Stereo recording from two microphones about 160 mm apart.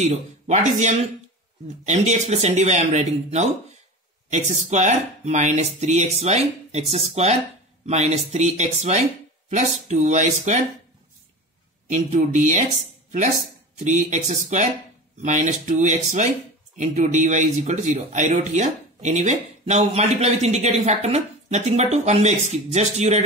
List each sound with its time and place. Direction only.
0.0 s speech: 45° right (ahead or behind)
11.9 s speech: 50° right (ahead or behind)
13.7 s speech: 50° right (ahead or behind)